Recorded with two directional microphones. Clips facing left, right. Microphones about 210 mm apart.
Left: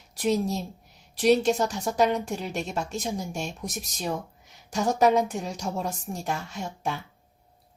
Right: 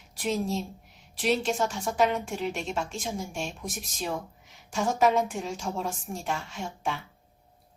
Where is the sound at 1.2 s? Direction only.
40° left (ahead or behind).